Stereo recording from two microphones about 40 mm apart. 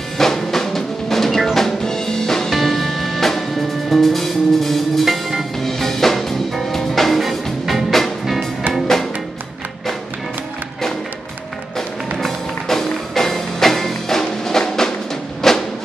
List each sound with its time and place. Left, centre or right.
0.2 s music: centre
12.2 s music: centre